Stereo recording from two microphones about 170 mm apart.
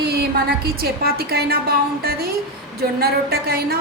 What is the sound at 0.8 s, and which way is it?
Speech, 65° right (ahead or behind).